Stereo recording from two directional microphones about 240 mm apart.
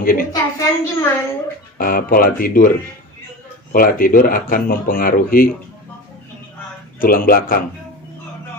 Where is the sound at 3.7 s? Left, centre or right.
Left.